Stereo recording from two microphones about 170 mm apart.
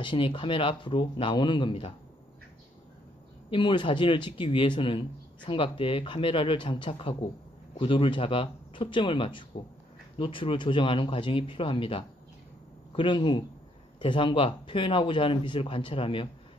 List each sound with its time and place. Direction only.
0.0 s speech: 30° left (ahead or behind)
3.4 s speech: 30° left (ahead or behind)